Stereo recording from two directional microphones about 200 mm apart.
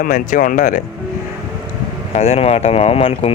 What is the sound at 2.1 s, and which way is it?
Speech, 30° left (ahead or behind).